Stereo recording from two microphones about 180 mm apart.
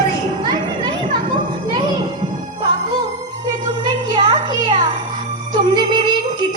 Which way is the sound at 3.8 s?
25° right (ahead or behind).